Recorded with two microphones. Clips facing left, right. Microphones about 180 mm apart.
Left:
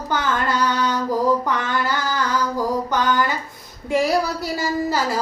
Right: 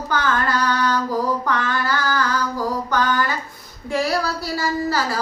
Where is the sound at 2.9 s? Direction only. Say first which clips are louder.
Right 1 dB; 20° left (ahead or behind).